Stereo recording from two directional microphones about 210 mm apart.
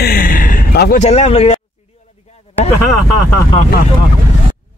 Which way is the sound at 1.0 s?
30° left (ahead or behind).